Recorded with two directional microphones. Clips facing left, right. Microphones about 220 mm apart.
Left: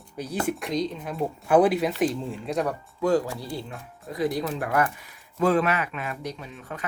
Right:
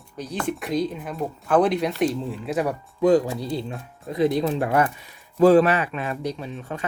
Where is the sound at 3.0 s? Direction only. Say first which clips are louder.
Right 5 dB; 20° right (ahead or behind).